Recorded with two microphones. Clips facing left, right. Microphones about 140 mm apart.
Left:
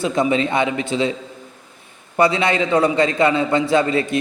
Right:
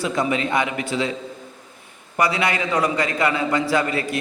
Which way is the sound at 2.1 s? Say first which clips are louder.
Left 4 dB; 25° left (ahead or behind).